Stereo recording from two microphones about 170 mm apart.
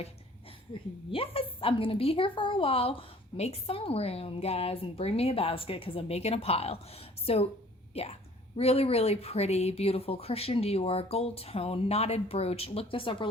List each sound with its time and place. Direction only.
0.7 s a woman's voice: 35° left (ahead or behind)